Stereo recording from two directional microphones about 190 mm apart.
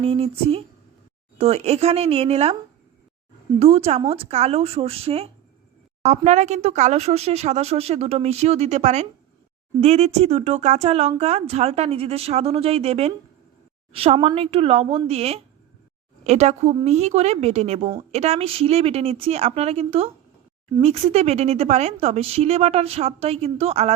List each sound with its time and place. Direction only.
0.0 s a woman's voice: 35° right (ahead or behind)
3.6 s a woman's voice: 30° right (ahead or behind)